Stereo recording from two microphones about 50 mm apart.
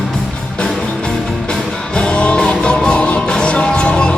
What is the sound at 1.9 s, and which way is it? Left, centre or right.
Music, left.